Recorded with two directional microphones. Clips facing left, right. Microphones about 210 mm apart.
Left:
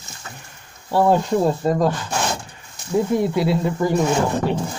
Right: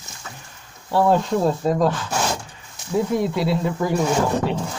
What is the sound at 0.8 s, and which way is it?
Speech, centre (ahead or behind).